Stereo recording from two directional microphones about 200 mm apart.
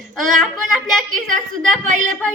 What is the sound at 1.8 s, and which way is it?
Speech, 40° right (ahead or behind).